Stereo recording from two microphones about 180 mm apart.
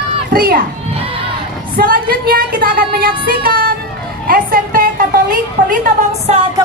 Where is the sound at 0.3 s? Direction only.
55° right (ahead or behind).